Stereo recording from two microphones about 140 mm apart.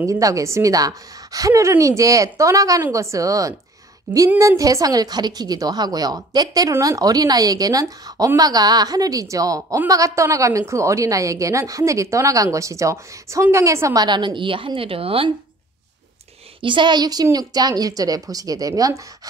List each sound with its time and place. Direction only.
0.0 s a woman's voice: 25° right (ahead or behind); by 15.3 s 40° right (ahead or behind)
16.6 s a woman's voice: 35° right (ahead or behind)